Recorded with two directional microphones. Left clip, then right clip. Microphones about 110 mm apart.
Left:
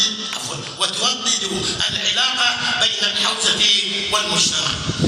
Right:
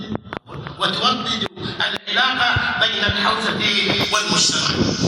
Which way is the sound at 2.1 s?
40° left (ahead or behind).